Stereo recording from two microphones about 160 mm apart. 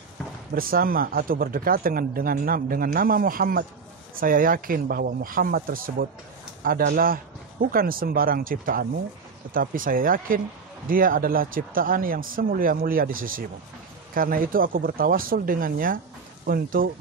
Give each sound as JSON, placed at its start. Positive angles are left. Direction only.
{"t": 0.6, "sound": "speech", "side_deg": -65}